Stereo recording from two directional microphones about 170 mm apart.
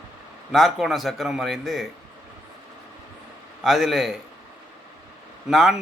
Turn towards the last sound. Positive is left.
turn(degrees=0)  # may be behind; listen again after turning